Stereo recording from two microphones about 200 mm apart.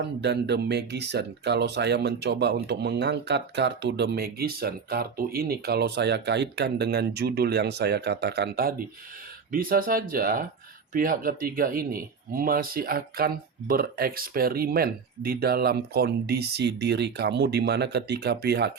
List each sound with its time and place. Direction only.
0.2 s speech: 55° right (ahead or behind)